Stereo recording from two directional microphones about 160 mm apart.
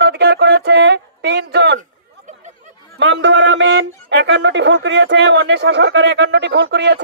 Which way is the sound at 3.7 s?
90° right.